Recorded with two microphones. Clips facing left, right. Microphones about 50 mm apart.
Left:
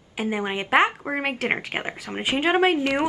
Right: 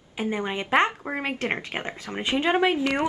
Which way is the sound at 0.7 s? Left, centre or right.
Centre.